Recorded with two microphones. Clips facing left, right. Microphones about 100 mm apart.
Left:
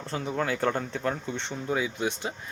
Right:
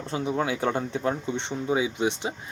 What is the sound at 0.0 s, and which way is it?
Speech, 15° right (ahead or behind).